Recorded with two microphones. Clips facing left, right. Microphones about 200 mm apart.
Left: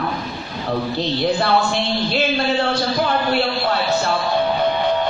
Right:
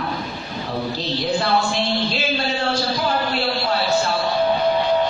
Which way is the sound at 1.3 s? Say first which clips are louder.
Left 1 dB; 60° left (ahead or behind).